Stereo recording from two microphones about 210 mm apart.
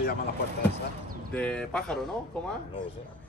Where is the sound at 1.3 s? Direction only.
5° left (ahead or behind).